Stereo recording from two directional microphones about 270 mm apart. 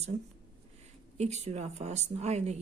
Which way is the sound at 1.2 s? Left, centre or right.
Right.